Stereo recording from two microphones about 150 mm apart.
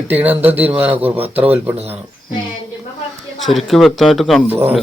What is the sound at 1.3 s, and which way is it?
Speech, 10° right (ahead or behind).